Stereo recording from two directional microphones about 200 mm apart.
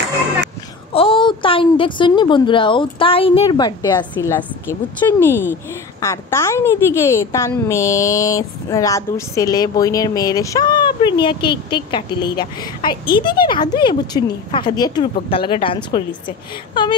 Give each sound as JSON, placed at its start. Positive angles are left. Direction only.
{"t": 0.9, "sound": "a woman's voice", "side_deg": 25}